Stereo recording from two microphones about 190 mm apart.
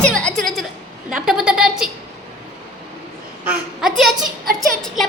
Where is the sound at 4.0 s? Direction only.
Centre (ahead or behind).